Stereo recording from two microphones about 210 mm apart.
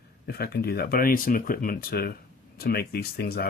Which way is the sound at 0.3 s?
50° left (ahead or behind).